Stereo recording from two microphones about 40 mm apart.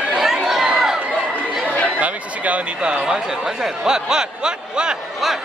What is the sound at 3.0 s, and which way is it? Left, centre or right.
Speech, centre.